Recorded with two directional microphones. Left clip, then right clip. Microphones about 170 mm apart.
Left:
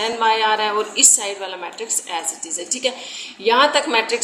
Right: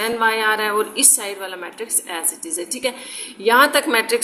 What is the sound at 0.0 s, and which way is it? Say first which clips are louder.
A woman's voice: left 1 dB; 30° right (ahead or behind).